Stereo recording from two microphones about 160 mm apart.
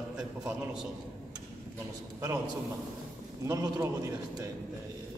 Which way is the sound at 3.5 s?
20° right (ahead or behind).